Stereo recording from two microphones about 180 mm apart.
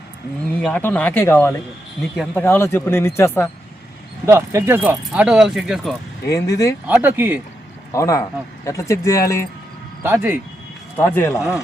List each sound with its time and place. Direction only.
0.6 s speech: 10° left (ahead or behind)
4.3 s speech: 15° right (ahead or behind)
6.3 s speech: 20° left (ahead or behind)
6.8 s speech: 10° right (ahead or behind)
7.9 s speech: 15° left (ahead or behind)
10.0 s speech: 10° right (ahead or behind)
10.9 s speech: 10° left (ahead or behind)